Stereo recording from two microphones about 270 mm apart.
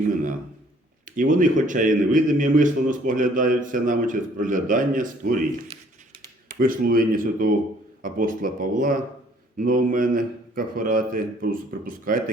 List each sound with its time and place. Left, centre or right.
1.0 s a man's voice: right
6.6 s a man's voice: right